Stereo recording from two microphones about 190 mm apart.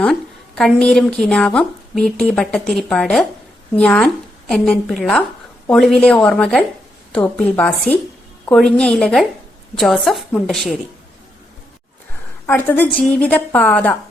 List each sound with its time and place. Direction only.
0.0 s a woman's voice: 5° left (ahead or behind)
12.5 s a woman's voice: 10° left (ahead or behind)